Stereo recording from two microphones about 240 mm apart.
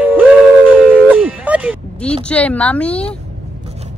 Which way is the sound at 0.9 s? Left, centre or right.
Centre.